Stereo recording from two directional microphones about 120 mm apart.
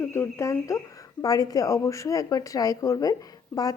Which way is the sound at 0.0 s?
20° left (ahead or behind).